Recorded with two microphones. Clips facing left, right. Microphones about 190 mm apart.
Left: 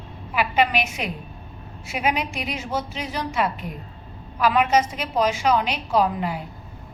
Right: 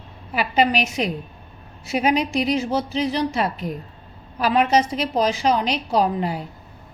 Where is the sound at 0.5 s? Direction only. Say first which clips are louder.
Right 4 dB; 35° right (ahead or behind).